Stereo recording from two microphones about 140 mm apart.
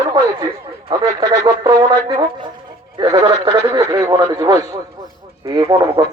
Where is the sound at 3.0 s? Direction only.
35° right (ahead or behind).